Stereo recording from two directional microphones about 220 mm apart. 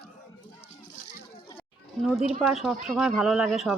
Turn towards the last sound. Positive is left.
turn(degrees=0)  # may be behind; listen again after turning